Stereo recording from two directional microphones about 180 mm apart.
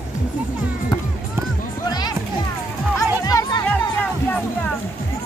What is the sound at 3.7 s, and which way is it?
Music, 10° left (ahead or behind).